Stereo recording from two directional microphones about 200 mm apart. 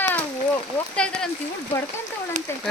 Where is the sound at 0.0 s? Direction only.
10° left (ahead or behind).